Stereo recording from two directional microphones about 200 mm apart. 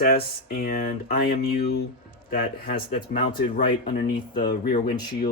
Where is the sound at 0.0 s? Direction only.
50° left (ahead or behind).